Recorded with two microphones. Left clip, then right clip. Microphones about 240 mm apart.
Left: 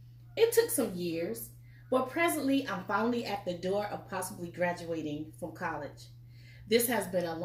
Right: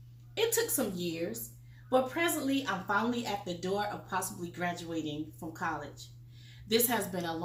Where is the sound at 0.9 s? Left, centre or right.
Centre.